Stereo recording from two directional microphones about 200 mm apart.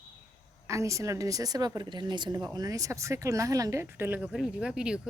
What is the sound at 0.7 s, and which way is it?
Speech, 15° right (ahead or behind).